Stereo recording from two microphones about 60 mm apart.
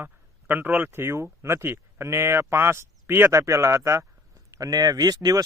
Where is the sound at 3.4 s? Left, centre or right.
Right.